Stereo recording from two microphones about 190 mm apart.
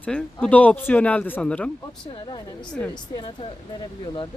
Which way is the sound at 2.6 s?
5° left (ahead or behind).